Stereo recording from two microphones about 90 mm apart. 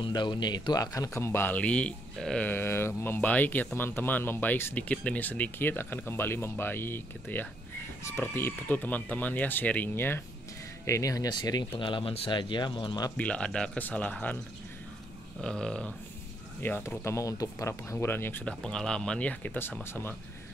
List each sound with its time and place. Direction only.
0.0 s speech: 60° left (ahead or behind); by 1.6 s 25° left (ahead or behind)
1.6 s speech: 15° left (ahead or behind)
2.4 s speech: 25° left (ahead or behind)
10.9 s speech: 40° left (ahead or behind)
11.7 s speech: 80° left; by 13.0 s 60° left (ahead or behind)
13.2 s speech: 10° left (ahead or behind)
15.4 s speech: 10° left (ahead or behind)
16.6 s speech: 20° left (ahead or behind)
18.4 s speech: 10° left (ahead or behind); by 20.2 s 25° left (ahead or behind)